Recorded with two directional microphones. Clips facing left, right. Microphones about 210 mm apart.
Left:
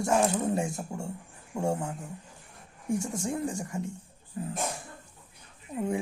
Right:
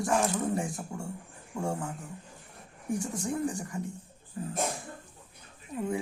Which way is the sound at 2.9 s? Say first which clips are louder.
Left 1 dB; 25° left (ahead or behind).